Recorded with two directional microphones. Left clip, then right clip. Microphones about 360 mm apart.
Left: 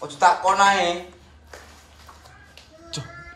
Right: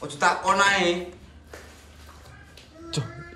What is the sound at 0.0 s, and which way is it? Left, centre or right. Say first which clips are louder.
Speech: left 5 dB; centre.